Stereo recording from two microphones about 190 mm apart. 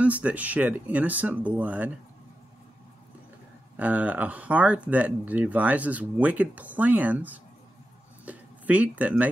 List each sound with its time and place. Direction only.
0.0 s speech: 5° right (ahead or behind)
3.7 s speech: 5° right (ahead or behind)